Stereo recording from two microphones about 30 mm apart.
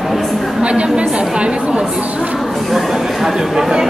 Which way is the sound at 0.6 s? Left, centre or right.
Right.